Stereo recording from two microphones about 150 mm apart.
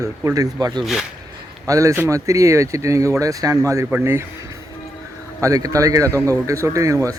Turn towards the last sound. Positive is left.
turn(degrees=-20)  # may be behind; listen again after turning